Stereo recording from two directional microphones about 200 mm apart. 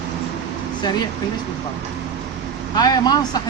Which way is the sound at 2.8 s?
20° left (ahead or behind).